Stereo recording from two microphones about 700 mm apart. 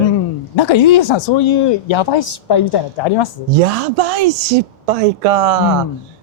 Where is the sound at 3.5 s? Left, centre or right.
Right.